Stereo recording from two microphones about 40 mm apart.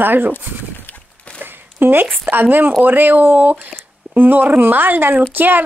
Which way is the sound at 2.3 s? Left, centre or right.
Right.